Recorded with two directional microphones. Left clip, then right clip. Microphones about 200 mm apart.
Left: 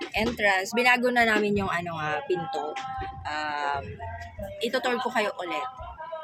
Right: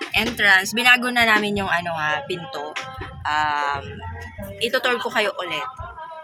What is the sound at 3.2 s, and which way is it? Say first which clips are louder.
A woman's voice: right 9 dB; 5° left (ahead or behind).